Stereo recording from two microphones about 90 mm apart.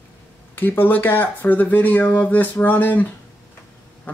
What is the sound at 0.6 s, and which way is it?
Speech, 20° left (ahead or behind).